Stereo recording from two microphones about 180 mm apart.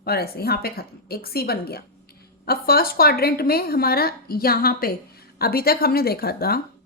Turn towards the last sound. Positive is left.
turn(degrees=60)  # may be behind; listen again after turning